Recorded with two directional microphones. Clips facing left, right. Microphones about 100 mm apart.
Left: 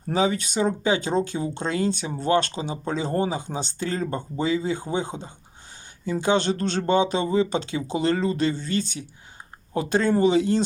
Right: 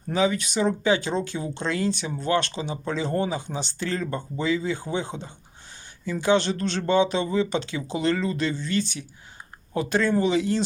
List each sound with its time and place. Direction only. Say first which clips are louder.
0.1 s speech: even; 40° left (ahead or behind)
6.1 s speech: even; 25° left (ahead or behind)
6.4 s speech: left 2 dB; 40° left (ahead or behind)